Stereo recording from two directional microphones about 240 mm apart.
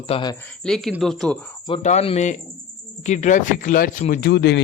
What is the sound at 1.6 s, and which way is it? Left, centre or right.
Speech, left.